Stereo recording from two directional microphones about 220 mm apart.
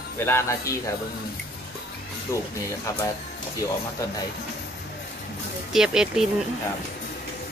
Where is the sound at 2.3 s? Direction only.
10° left (ahead or behind).